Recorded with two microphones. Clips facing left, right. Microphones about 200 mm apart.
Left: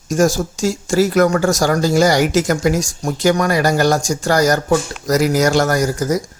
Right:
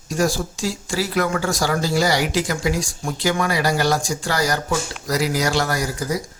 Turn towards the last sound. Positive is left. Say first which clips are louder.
# left 7 dB
turn(degrees=45)  # may be behind; listen again after turning